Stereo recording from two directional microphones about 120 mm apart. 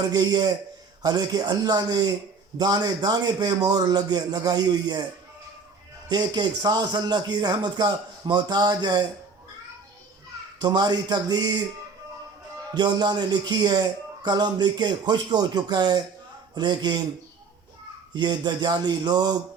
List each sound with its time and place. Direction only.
0.1 s speech: 35° right (ahead or behind)
6.1 s speech: 35° right (ahead or behind)
10.6 s speech: 35° right (ahead or behind)
12.7 s speech: 35° right (ahead or behind)
18.1 s speech: 35° right (ahead or behind)